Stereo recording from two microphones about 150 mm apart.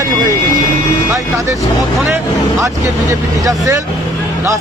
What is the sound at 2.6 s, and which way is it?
Speech, 20° right (ahead or behind).